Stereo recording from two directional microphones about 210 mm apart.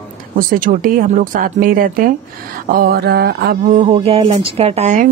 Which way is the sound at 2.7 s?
45° right (ahead or behind).